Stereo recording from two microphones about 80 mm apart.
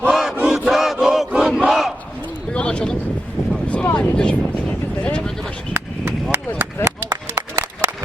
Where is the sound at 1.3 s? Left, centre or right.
Centre.